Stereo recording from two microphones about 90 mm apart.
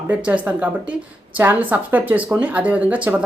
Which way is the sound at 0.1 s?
15° right (ahead or behind).